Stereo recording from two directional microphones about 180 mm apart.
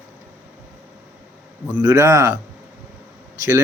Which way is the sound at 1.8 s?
15° right (ahead or behind).